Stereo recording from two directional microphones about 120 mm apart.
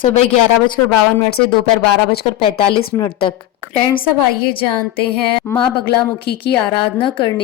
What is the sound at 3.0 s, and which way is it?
Speech, 45° left (ahead or behind).